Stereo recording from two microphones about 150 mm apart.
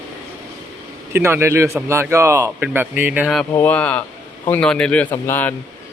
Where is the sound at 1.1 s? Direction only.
15° right (ahead or behind).